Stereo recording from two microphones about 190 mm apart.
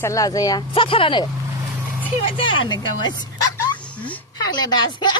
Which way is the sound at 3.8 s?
5° left (ahead or behind).